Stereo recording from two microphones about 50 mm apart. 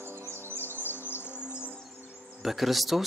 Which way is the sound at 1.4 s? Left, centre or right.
Right.